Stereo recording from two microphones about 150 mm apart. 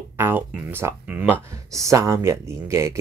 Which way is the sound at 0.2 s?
15° right (ahead or behind).